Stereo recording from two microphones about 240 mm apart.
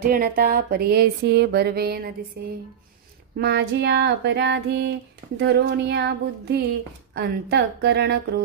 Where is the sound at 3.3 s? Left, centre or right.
Right.